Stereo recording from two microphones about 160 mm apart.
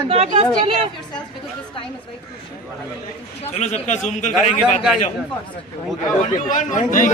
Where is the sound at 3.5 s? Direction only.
45° left (ahead or behind).